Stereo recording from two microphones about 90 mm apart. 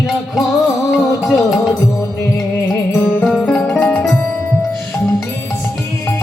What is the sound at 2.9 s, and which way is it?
Music, 15° left (ahead or behind).